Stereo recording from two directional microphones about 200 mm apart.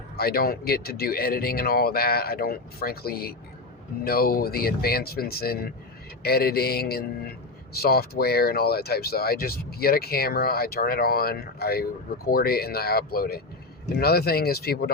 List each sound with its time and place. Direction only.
0.2 s speech: 50° left (ahead or behind)